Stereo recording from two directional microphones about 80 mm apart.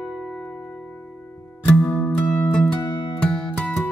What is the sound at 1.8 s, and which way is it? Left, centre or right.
Music, centre.